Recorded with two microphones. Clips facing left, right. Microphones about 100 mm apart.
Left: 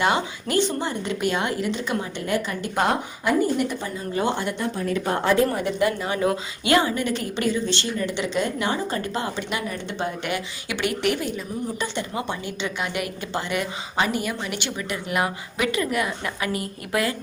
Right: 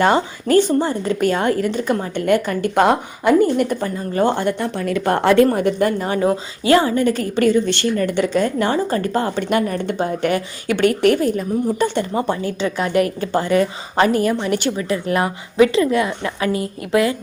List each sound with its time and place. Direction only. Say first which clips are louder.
0.0 s a woman's voice: right 6 dB; 45° right (ahead or behind)
2.2 s a woman's voice: right 12 dB; 60° right (ahead or behind)
4.9 s a woman's voice: right 7 dB; 70° right (ahead or behind)
5.5 s a woman's voice: right 5 dB; 45° right (ahead or behind); by 17.2 s 25° right (ahead or behind)